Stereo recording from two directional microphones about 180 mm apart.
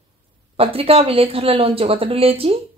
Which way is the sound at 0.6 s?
30° right (ahead or behind).